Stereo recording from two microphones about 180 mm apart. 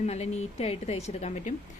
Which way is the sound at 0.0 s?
40° left (ahead or behind).